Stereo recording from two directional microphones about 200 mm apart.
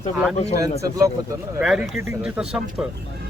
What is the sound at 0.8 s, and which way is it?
Speech, 15° right (ahead or behind).